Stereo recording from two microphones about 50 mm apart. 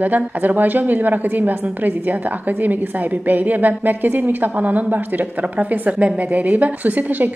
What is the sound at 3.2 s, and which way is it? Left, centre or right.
Speech, right.